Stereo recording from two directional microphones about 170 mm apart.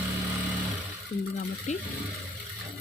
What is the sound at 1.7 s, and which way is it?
Speech, 40° left (ahead or behind).